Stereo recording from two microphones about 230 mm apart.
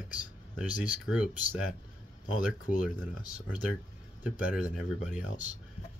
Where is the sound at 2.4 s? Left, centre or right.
Centre.